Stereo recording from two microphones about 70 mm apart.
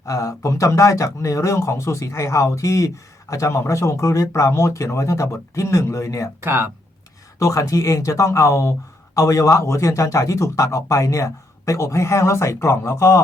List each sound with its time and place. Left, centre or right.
0.0 s speech: left
6.4 s speech: right
7.3 s speech: left